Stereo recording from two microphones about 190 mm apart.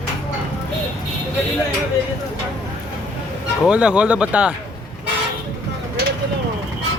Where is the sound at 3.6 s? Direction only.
5° right (ahead or behind).